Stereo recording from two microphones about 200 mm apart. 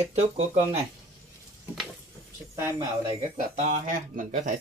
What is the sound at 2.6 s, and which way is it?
Speech, 15° right (ahead or behind).